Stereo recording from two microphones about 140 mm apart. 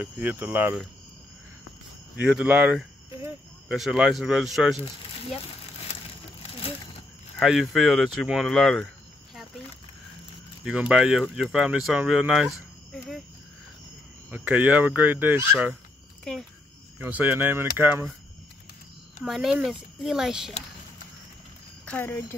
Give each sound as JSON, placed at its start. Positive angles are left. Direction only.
{"t": 0.0, "sound": "speech", "side_deg": -10}
{"t": 2.1, "sound": "speech", "side_deg": -10}
{"t": 4.7, "sound": "speech", "side_deg": 40}
{"t": 7.3, "sound": "speech", "side_deg": 0}
{"t": 10.6, "sound": "speech", "side_deg": -5}
{"t": 14.3, "sound": "speech", "side_deg": -10}
{"t": 17.0, "sound": "speech", "side_deg": -15}
{"t": 19.2, "sound": "speech", "side_deg": 0}
{"t": 21.8, "sound": "speech", "side_deg": 15}